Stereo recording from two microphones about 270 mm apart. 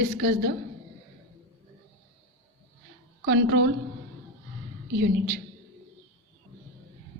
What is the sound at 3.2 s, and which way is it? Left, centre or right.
Speech, right.